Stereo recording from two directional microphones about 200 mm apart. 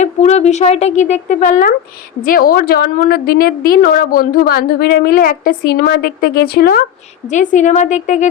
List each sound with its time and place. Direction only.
0.0 s a woman's voice: 35° left (ahead or behind)
7.3 s speech: 35° left (ahead or behind)